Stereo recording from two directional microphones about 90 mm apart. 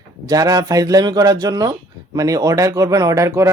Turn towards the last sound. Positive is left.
turn(degrees=-35)  # may be behind; listen again after turning